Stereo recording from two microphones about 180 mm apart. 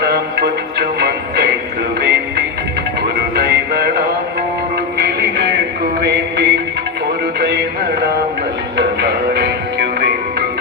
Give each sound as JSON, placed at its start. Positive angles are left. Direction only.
{"t": 0.0, "sound": "music", "side_deg": -65}
{"t": 9.0, "sound": "music", "side_deg": -65}